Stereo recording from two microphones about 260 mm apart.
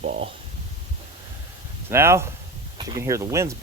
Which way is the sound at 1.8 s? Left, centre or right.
Centre.